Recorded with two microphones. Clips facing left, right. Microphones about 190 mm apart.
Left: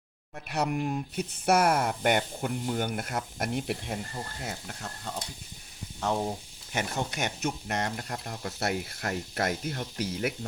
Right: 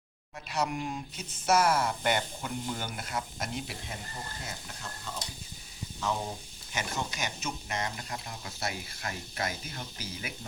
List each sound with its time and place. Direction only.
0.4 s speech: 60° left (ahead or behind)
6.7 s speech: 60° left (ahead or behind)